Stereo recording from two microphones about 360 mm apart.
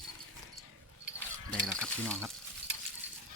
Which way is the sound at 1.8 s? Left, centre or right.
Centre.